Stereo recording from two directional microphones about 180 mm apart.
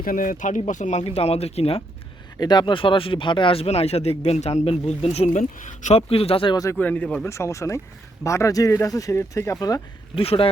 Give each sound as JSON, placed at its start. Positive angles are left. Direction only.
{"t": 0.0, "sound": "speech", "side_deg": 50}
{"t": 2.4, "sound": "speech", "side_deg": 25}
{"t": 6.7, "sound": "speech", "side_deg": 10}
{"t": 10.2, "sound": "speech", "side_deg": 30}